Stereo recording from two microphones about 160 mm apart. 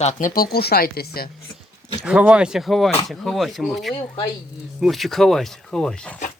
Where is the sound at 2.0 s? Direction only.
5° right (ahead or behind).